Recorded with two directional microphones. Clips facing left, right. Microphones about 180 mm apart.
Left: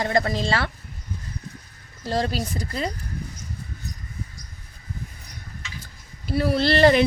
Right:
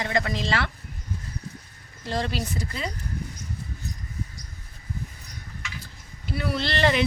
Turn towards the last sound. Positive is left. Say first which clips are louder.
# left 7 dB
turn(degrees=40)  # may be behind; listen again after turning